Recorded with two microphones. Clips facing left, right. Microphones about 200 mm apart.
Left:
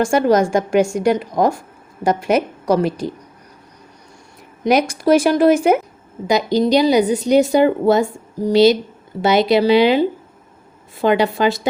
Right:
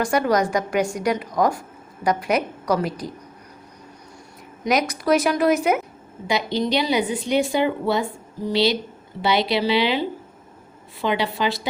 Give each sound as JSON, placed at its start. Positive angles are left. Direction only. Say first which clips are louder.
{"t": 0.0, "sound": "a woman's voice", "louder": "left 5 dB", "side_deg": 25}
{"t": 4.6, "sound": "a woman's voice", "louder": "left 6 dB", "side_deg": 30}
{"t": 6.2, "sound": "speech", "louder": "left 7 dB", "side_deg": 40}